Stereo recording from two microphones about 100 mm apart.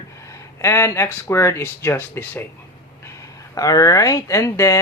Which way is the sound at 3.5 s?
35° left (ahead or behind).